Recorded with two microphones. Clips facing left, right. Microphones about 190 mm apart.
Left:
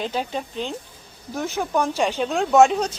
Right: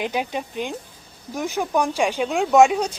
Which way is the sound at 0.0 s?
15° right (ahead or behind).